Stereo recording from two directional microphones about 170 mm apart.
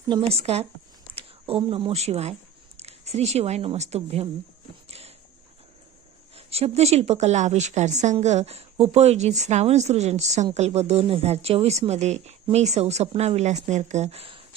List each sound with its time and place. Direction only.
0.1 s a woman's voice: 35° right (ahead or behind)
4.9 s a sound: 35° right (ahead or behind)
6.3 s a woman's voice: 35° right (ahead or behind)